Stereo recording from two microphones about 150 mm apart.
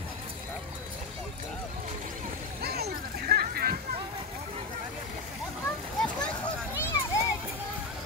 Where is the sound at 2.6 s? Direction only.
90° right.